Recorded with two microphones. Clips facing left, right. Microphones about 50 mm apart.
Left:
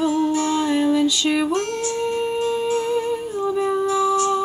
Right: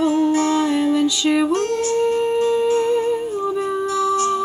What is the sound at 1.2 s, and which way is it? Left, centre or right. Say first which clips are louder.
Music: right 3 dB; centre.